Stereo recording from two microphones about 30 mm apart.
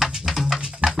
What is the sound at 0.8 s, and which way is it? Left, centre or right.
Music, right.